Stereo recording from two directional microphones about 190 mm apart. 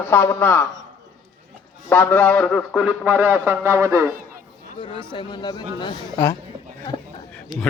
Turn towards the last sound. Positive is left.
turn(degrees=5)  # may be behind; listen again after turning